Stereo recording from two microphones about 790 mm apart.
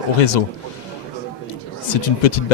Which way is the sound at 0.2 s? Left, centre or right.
Left.